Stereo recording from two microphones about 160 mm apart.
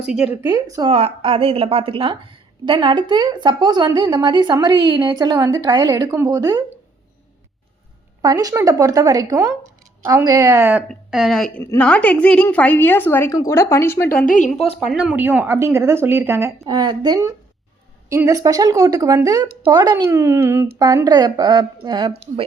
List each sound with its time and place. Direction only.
0.4 s a woman's voice: 20° right (ahead or behind)
0.9 s a woman's voice: 35° right (ahead or behind)
8.2 s a woman's voice: 20° right (ahead or behind)
10.8 s a woman's voice: centre (ahead or behind)
11.6 s a woman's voice: 10° left (ahead or behind)
14.3 s a woman's voice: 50° left (ahead or behind)
14.8 s a woman's voice: 5° right (ahead or behind)
16.6 s a woman's voice: 25° right (ahead or behind)